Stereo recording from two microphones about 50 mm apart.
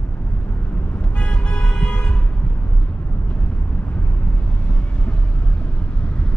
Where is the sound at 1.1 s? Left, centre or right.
Left.